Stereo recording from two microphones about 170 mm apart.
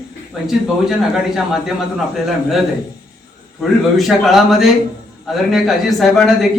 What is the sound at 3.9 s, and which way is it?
Speech, centre (ahead or behind).